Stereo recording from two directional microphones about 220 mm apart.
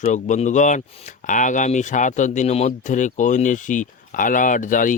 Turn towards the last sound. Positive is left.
turn(degrees=35)  # may be behind; listen again after turning